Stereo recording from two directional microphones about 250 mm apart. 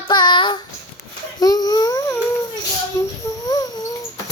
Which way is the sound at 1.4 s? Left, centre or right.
Centre.